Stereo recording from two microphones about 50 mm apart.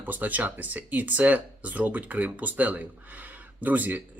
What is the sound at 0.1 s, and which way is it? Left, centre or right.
Speech, right.